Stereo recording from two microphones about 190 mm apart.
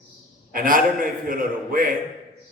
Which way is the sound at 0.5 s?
45° right (ahead or behind).